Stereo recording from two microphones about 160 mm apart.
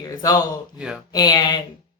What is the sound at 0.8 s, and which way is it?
Speech, 5° right (ahead or behind).